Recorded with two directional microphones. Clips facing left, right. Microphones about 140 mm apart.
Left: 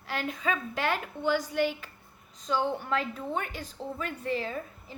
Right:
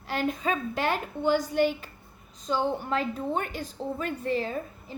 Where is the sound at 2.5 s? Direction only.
25° right (ahead or behind).